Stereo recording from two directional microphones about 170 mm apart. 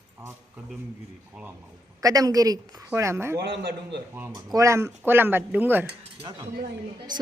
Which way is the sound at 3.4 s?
85° right.